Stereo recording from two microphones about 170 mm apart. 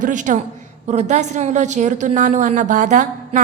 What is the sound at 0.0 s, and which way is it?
A woman's voice, 50° right (ahead or behind).